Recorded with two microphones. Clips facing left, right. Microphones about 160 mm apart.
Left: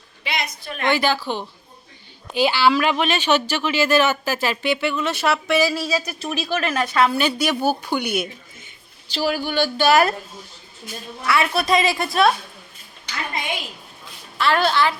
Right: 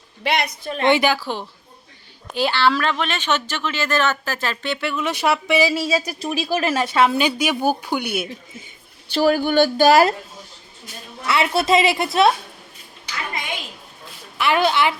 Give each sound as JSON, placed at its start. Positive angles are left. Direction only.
{"t": 0.2, "sound": "a woman's voice", "side_deg": -65}
{"t": 0.7, "sound": "speech", "side_deg": -25}
{"t": 1.0, "sound": "a woman's voice", "side_deg": -5}
{"t": 5.0, "sound": "speech", "side_deg": -10}
{"t": 7.2, "sound": "a woman's voice", "side_deg": -10}
{"t": 9.1, "sound": "speech", "side_deg": -50}
{"t": 11.3, "sound": "speech", "side_deg": -20}
{"t": 14.3, "sound": "a woman's voice", "side_deg": -15}